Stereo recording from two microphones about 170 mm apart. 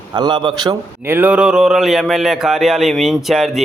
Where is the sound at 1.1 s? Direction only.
10° right (ahead or behind).